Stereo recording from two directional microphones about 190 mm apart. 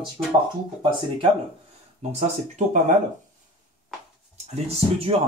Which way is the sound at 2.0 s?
35° right (ahead or behind).